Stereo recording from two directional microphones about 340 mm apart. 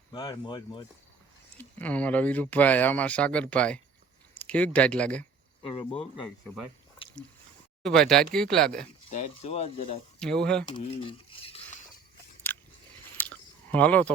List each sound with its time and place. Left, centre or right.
0.1 s speech: centre
5.6 s speech: centre
7.8 s speech: centre
9.0 s speech: left
10.2 s speech: centre
10.7 s speech: centre
12.5 s a sound: centre